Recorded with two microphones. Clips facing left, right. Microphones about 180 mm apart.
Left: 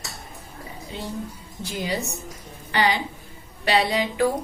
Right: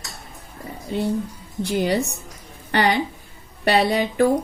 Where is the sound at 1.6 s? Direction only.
65° right (ahead or behind).